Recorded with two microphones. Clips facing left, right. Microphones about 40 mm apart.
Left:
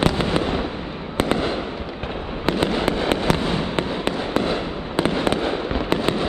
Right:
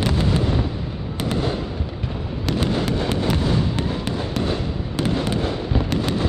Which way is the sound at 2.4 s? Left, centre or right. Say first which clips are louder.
Left 2 dB; left.